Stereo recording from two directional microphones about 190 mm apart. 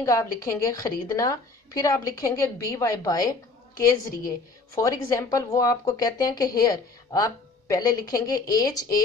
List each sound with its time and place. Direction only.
0.0 s a woman's voice: 15° left (ahead or behind)
4.7 s speech: 15° left (ahead or behind)